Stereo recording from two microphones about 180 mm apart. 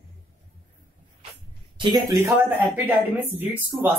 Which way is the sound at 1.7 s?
25° right (ahead or behind).